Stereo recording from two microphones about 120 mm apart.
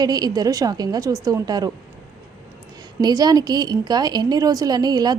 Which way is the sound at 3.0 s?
35° right (ahead or behind).